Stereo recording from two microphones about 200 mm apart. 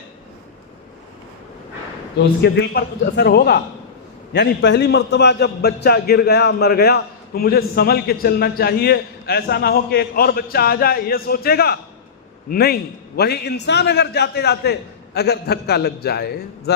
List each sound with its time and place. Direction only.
2.4 s a man's voice: 55° left (ahead or behind)